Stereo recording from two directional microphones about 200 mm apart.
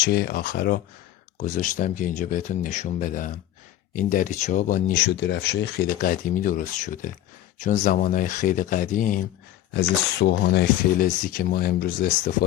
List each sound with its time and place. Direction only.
0.0 s speech: 50° left (ahead or behind)
5.1 s speech: 60° left (ahead or behind); by 9.2 s 40° left (ahead or behind)
10.2 s speech: 60° left (ahead or behind)